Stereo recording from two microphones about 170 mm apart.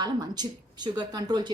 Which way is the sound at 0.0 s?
25° right (ahead or behind).